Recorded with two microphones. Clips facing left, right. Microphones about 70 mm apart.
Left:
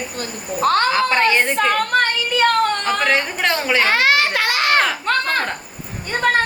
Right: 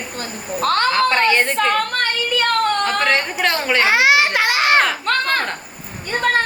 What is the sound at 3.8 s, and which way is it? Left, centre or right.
Children playing, centre.